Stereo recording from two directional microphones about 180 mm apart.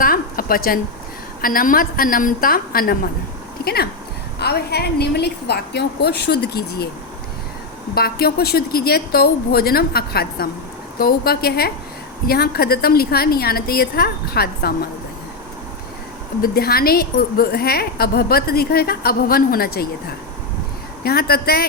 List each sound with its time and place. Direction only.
0.0 s a sound: 55° left (ahead or behind)
1.4 s a woman's voice: 50° left (ahead or behind)
7.9 s a woman's voice: 60° left (ahead or behind)
16.4 s a woman's voice: 60° left (ahead or behind)
21.0 s a woman's voice: 60° left (ahead or behind)